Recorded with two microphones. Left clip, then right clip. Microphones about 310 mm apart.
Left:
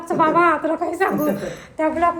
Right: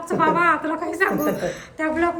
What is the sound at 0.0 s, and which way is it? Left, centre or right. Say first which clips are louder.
A woman's voice: left 2 dB; centre.